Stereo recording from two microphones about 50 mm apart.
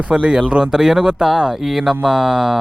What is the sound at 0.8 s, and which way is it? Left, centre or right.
Speech, centre.